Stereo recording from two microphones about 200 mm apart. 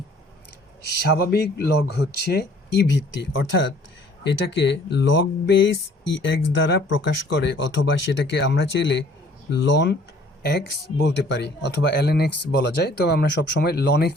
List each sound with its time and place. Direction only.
0.9 s speech: 55° left (ahead or behind)